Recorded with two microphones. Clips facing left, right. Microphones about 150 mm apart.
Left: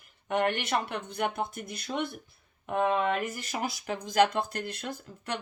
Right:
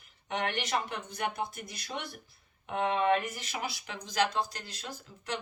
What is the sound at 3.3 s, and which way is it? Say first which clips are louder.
Speech: left 4 dB; 45° left (ahead or behind).